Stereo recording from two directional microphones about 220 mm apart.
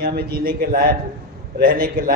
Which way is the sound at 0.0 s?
45° right (ahead or behind).